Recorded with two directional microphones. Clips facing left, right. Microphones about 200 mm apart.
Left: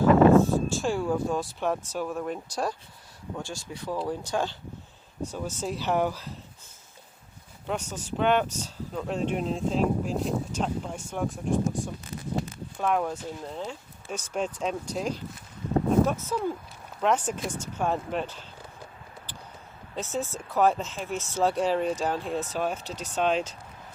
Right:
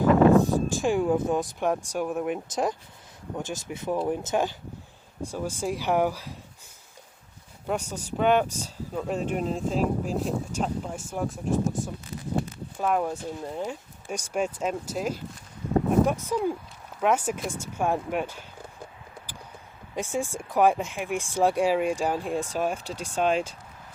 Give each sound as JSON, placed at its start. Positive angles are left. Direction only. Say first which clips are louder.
{"t": 0.0, "sound": "speech", "louder": "left 1 dB", "side_deg": -15}
{"t": 7.7, "sound": "speech", "louder": "right 2 dB", "side_deg": -10}
{"t": 12.8, "sound": "speech", "louder": "right 1 dB", "side_deg": -5}
{"t": 20.0, "sound": "speech", "louder": "right 2 dB", "side_deg": -10}